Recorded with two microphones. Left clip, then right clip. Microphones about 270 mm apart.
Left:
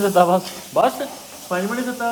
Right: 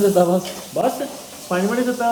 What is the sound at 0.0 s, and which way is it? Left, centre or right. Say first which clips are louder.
Speech: left 1 dB; centre.